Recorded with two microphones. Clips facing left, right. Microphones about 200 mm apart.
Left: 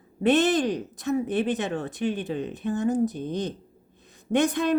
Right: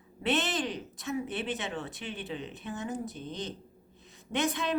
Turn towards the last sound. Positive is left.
turn(degrees=45)  # may be behind; listen again after turning